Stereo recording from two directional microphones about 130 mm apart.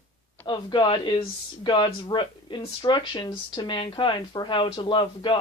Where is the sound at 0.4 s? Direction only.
35° left (ahead or behind).